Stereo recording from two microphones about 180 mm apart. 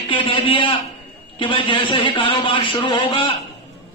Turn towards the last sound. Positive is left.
turn(degrees=30)  # may be behind; listen again after turning